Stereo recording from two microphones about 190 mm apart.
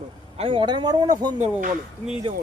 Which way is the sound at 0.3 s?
25° right (ahead or behind).